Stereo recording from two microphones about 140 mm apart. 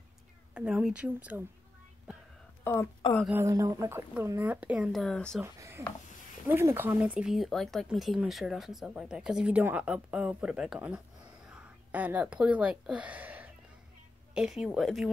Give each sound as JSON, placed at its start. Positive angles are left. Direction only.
{"t": 0.6, "sound": "speech", "side_deg": -5}
{"t": 2.6, "sound": "speech", "side_deg": 15}
{"t": 3.4, "sound": "speech", "side_deg": -25}
{"t": 5.4, "sound": "speech", "side_deg": -20}